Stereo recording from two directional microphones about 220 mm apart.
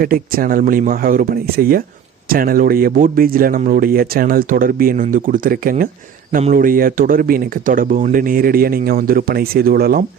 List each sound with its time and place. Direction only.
0.0 s speech: 40° right (ahead or behind)